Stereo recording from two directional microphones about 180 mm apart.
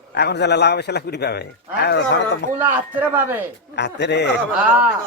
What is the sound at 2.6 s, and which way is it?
Speech, 10° right (ahead or behind).